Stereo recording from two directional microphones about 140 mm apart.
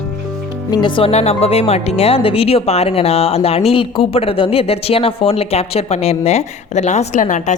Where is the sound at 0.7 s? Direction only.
35° left (ahead or behind).